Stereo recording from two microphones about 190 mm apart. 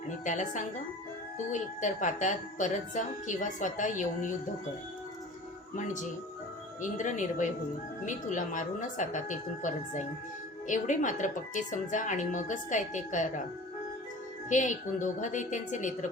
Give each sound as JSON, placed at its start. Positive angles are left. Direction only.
{"t": 0.1, "sound": "a woman's voice", "side_deg": 40}
{"t": 6.8, "sound": "a woman's voice", "side_deg": 40}
{"t": 14.5, "sound": "a woman's voice", "side_deg": 40}